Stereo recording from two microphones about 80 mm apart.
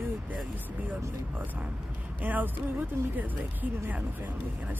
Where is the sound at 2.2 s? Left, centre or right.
Right.